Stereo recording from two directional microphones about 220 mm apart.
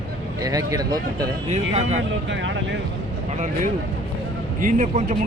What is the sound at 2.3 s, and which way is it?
Speech, 55° right (ahead or behind).